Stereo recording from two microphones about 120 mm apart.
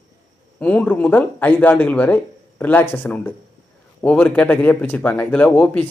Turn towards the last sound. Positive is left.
turn(degrees=10)  # may be behind; listen again after turning